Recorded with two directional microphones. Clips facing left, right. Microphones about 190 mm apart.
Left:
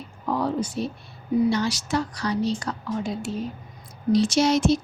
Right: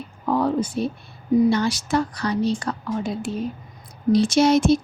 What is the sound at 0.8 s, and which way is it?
A woman's voice, 55° right (ahead or behind).